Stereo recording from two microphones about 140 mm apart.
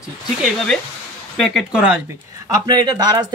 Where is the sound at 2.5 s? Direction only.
30° right (ahead or behind).